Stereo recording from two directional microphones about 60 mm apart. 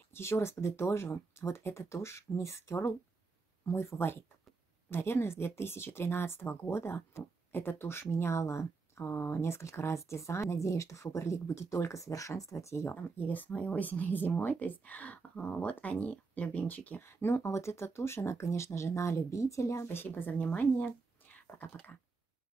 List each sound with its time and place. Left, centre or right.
0.1 s speech: left
12.9 s speech: left
17.0 s speech: left